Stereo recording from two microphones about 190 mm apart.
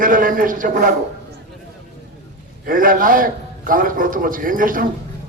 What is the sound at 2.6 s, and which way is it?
A man's voice, 45° right (ahead or behind).